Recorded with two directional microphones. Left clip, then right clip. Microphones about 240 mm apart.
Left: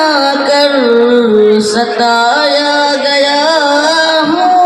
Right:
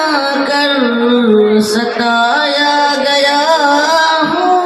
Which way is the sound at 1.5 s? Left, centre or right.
Left.